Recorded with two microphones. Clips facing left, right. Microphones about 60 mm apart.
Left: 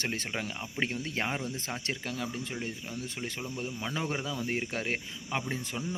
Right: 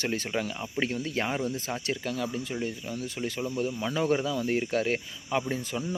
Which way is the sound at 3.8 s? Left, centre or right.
Centre.